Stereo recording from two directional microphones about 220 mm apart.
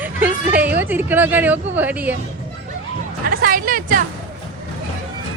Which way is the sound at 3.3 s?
40° right (ahead or behind).